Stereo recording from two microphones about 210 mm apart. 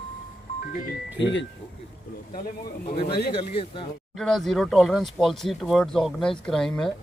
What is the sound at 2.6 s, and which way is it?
Speech, 25° left (ahead or behind).